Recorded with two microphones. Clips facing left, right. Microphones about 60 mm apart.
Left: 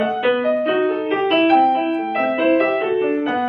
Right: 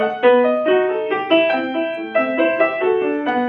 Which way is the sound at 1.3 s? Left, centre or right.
Centre.